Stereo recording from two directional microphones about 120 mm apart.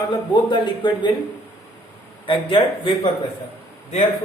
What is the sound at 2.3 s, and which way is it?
Speech, 45° left (ahead or behind).